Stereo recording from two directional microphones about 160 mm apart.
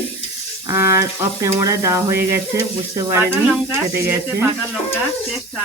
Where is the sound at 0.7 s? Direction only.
15° right (ahead or behind).